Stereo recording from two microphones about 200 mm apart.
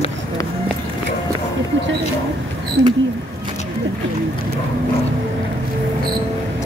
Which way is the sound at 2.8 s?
90° right.